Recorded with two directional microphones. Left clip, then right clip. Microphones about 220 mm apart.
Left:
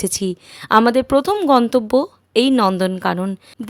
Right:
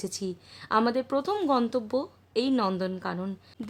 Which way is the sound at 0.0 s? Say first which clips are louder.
Left 12 dB; 35° left (ahead or behind).